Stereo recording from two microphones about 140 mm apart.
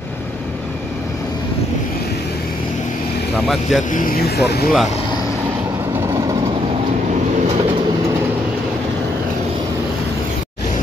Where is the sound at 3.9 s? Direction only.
90° left.